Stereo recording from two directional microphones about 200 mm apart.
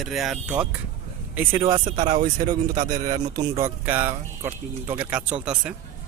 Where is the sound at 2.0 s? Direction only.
30° right (ahead or behind).